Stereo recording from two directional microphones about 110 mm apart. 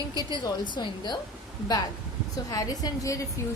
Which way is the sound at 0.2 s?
40° left (ahead or behind).